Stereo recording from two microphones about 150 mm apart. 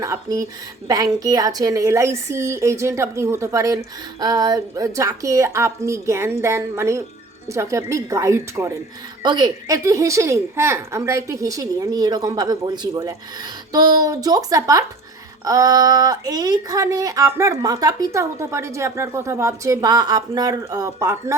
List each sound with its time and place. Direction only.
0.0 s speech: 25° right (ahead or behind)
9.2 s speech: 30° right (ahead or behind)